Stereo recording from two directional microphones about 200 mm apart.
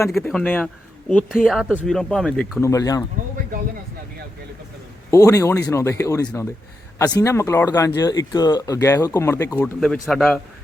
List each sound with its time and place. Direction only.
0.1 s a man's voice: centre (ahead or behind); by 3.0 s 15° left (ahead or behind)
5.1 s speech: 15° left (ahead or behind)
9.8 s a man's voice: 5° left (ahead or behind)